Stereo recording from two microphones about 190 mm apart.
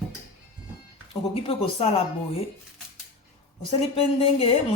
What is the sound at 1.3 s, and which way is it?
Speech, 30° left (ahead or behind).